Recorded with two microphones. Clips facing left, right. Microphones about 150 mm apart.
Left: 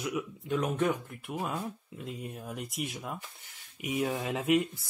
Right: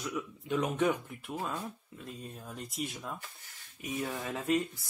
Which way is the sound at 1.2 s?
10° left (ahead or behind).